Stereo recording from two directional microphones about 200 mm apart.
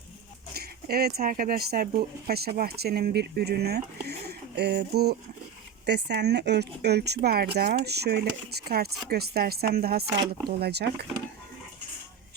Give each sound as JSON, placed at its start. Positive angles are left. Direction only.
{"t": 0.5, "sound": "speech", "side_deg": -50}